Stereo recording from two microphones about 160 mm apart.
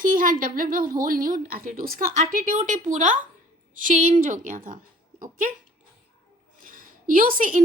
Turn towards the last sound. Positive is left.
turn(degrees=-60)  # may be behind; listen again after turning